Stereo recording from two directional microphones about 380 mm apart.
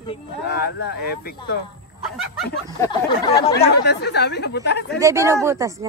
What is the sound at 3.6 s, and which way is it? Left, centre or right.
Speech, left.